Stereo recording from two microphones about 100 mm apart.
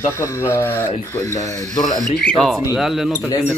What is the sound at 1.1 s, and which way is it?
Speech, 35° left (ahead or behind).